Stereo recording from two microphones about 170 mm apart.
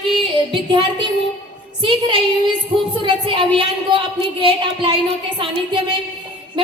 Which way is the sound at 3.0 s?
30° right (ahead or behind).